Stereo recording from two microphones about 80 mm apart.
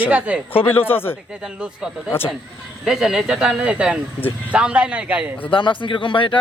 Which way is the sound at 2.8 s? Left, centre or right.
Centre.